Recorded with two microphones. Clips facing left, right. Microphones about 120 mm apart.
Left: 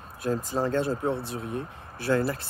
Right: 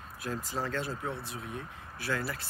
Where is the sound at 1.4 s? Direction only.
50° left (ahead or behind).